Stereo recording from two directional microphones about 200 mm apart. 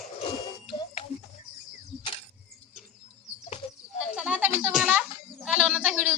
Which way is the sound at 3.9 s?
5° right (ahead or behind).